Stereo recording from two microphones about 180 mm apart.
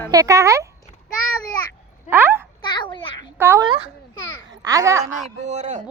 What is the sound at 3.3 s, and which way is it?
Speech, 15° right (ahead or behind).